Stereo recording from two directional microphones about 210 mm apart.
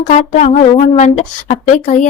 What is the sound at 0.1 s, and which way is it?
Speech, 35° left (ahead or behind).